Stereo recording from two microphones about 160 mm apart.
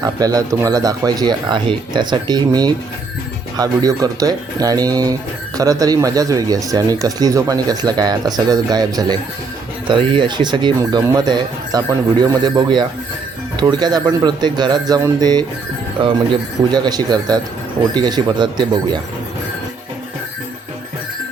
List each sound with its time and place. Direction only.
0.0 s speech: 25° right (ahead or behind)